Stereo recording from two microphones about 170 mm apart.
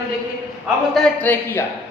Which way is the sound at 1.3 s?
10° left (ahead or behind).